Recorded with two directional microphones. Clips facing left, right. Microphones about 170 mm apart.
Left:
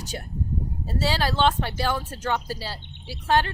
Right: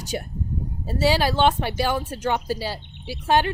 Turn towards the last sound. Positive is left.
turn(degrees=-15)  # may be behind; listen again after turning